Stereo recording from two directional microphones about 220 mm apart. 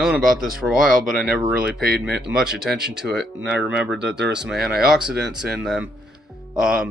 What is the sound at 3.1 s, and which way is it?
Speech, 50° right (ahead or behind).